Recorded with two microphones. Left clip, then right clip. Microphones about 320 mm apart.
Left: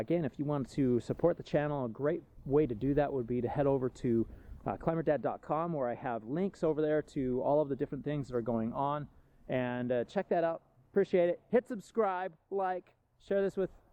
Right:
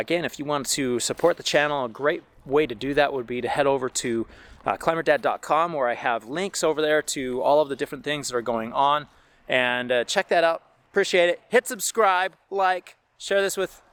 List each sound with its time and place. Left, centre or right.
0.0 s speech: centre